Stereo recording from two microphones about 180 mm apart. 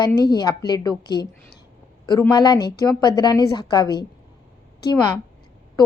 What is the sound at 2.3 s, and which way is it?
A woman's voice, 20° left (ahead or behind).